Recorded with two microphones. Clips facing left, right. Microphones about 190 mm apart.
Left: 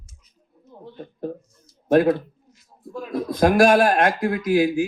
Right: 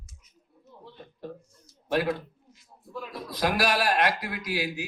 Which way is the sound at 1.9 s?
50° left (ahead or behind).